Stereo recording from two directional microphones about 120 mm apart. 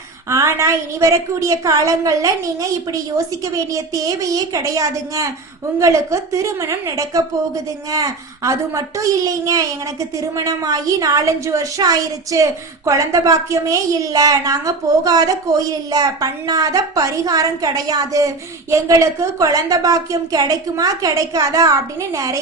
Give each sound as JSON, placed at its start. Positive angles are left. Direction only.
{"t": 0.3, "sound": "a woman's voice", "side_deg": -25}